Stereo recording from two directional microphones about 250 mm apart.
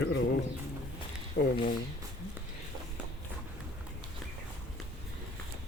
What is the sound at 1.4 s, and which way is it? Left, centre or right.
Speech, left.